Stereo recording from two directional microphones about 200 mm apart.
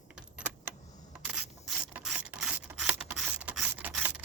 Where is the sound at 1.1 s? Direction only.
5° right (ahead or behind).